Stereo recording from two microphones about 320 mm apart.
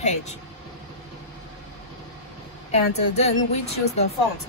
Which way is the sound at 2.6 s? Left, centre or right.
Centre.